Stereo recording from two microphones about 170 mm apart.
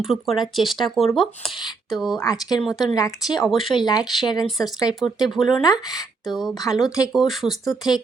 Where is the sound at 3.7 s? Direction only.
25° left (ahead or behind).